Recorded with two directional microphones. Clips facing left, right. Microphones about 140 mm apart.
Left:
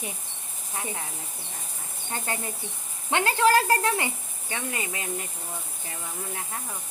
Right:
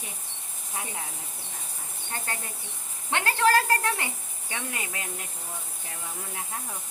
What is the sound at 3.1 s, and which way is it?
Speech, 15° left (ahead or behind).